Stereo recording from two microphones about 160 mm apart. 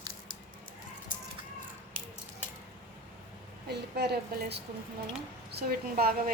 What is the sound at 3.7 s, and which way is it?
Speech, 90° right.